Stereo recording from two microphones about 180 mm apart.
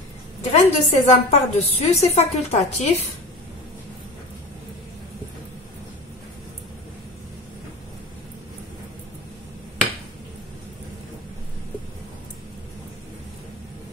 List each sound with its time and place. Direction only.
0.5 s a woman's voice: 35° left (ahead or behind)